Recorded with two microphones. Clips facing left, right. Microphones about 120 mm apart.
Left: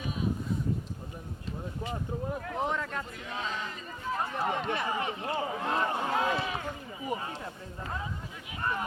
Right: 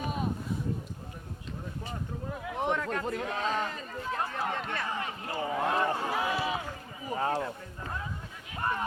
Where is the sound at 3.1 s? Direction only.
55° right (ahead or behind).